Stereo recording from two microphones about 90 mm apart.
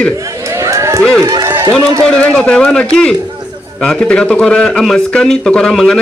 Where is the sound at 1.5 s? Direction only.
30° right (ahead or behind).